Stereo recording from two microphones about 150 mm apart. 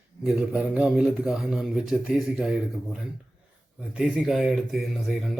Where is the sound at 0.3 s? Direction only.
5° right (ahead or behind).